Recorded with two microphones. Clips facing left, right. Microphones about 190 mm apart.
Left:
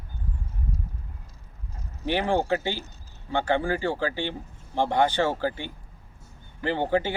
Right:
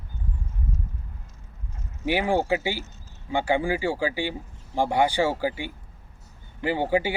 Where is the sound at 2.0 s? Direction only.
10° right (ahead or behind).